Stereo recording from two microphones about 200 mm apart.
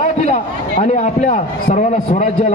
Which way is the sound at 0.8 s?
35° left (ahead or behind).